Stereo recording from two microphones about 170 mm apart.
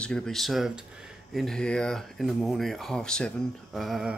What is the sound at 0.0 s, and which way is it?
Speech, 5° left (ahead or behind).